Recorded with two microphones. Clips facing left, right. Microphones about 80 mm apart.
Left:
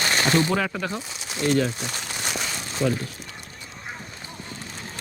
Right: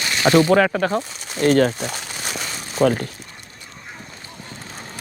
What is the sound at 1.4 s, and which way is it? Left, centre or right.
Speech, right.